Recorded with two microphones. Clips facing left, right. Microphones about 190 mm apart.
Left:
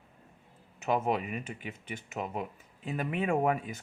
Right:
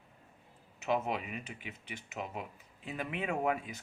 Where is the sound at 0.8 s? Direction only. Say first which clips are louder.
Left 4 dB; 50° left (ahead or behind).